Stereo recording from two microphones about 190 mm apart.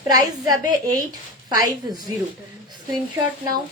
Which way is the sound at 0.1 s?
20° right (ahead or behind).